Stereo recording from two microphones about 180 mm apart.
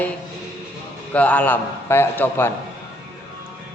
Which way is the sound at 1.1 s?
10° left (ahead or behind).